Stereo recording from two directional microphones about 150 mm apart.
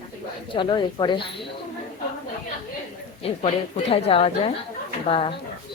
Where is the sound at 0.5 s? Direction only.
30° left (ahead or behind).